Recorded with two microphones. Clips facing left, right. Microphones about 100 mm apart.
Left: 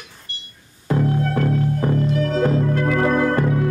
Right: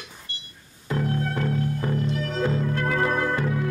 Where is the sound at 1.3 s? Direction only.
45° left (ahead or behind).